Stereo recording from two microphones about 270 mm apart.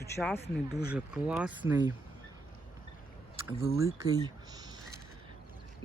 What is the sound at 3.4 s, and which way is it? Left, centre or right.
Speech, centre.